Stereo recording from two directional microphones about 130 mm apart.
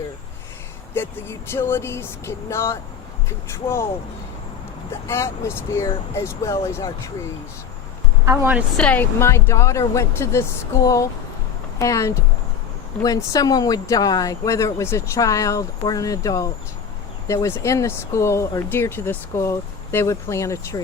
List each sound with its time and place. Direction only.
0.9 s speech: 20° left (ahead or behind)
5.0 s speech: 20° left (ahead or behind)
8.2 s speech: 20° right (ahead or behind)
8.8 s speech: 15° left (ahead or behind)